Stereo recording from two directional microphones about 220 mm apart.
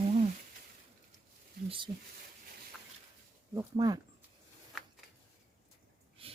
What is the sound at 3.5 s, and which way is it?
Speech, 15° right (ahead or behind).